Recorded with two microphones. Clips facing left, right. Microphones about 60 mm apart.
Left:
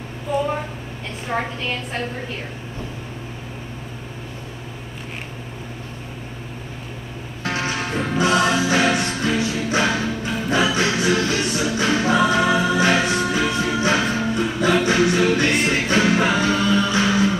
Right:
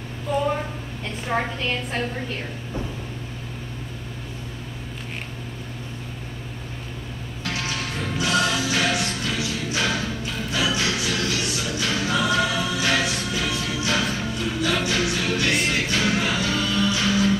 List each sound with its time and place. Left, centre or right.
0.3 s a sound: centre
1.2 s a woman's voice: centre
7.4 s music: left
10.5 s music: left
12.6 s music: left
15.3 s music: left
15.6 s music: left